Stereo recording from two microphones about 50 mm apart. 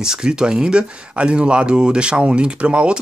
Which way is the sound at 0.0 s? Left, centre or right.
Centre.